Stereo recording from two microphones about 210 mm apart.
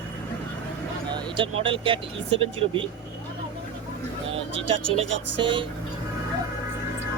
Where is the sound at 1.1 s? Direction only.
25° right (ahead or behind).